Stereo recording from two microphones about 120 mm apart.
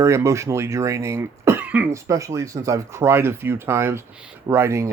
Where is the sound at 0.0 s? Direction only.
25° right (ahead or behind).